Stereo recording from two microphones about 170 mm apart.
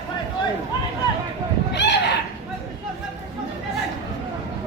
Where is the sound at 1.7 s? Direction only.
90° left.